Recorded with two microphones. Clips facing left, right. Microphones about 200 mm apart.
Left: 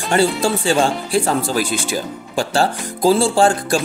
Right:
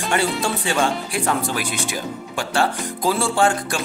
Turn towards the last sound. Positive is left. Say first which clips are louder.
# left 4 dB
turn(degrees=30)  # may be behind; listen again after turning